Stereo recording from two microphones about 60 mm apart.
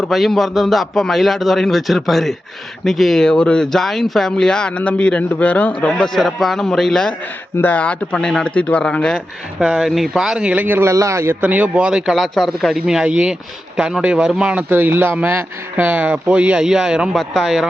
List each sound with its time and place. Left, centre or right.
0.0 s a man's voice: centre; by 5.9 s left
6.0 s speech: centre
7.6 s speech: left
8.1 s speech: centre
9.6 s speech: centre
10.5 s speech: right
10.9 s a man's voice: right
11.3 s speech: right
12.1 s a man's voice: centre
12.8 s speech: centre
14.7 s a man's voice: right; by 17.7 s centre